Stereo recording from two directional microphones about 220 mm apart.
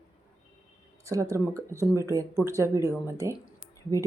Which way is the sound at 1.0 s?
15° right (ahead or behind).